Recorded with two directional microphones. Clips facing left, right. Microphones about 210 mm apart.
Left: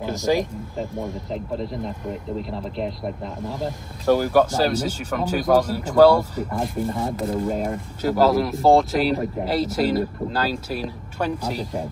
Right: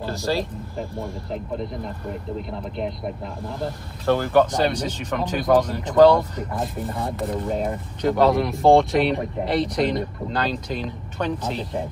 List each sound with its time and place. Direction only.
0.0 s speech: 15° left (ahead or behind)
3.5 s speech: 10° left (ahead or behind)